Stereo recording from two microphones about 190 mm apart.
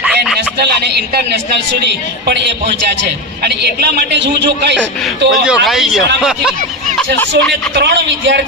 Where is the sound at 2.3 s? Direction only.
60° right (ahead or behind).